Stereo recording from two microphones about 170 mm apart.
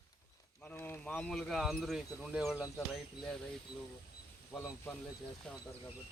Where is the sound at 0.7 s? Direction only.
10° left (ahead or behind).